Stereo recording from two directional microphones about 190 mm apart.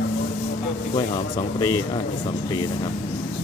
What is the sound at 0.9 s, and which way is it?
Speech, 30° left (ahead or behind).